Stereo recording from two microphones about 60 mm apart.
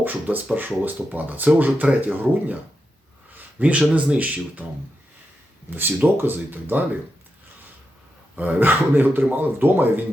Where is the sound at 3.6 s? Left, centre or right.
Right.